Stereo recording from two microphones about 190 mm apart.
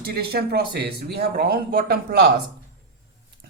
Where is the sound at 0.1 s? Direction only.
55° right (ahead or behind).